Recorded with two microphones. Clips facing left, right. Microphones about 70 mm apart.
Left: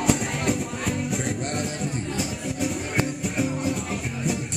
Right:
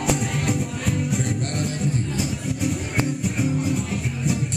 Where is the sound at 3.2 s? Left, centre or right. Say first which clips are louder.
Right 2 dB; centre.